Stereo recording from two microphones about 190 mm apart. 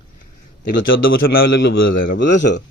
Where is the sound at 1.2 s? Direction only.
55° left (ahead or behind).